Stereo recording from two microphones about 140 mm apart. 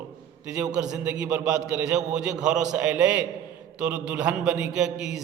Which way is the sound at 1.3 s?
20° right (ahead or behind).